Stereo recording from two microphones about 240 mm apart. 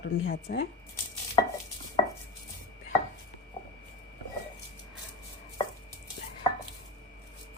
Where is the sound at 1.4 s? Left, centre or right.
Centre.